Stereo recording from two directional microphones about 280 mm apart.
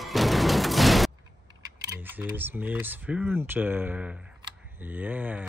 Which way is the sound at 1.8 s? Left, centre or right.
Centre.